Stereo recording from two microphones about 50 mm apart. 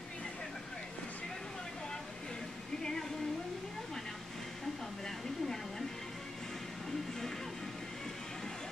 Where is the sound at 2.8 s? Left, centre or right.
Centre.